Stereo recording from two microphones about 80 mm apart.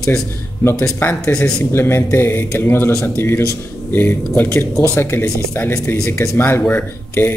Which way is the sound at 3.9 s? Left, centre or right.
Left.